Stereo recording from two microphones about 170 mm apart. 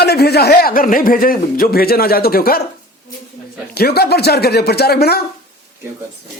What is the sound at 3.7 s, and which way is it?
Speech, 70° left (ahead or behind).